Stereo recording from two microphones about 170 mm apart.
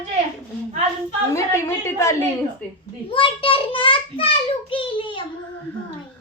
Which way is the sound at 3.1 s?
30° left (ahead or behind).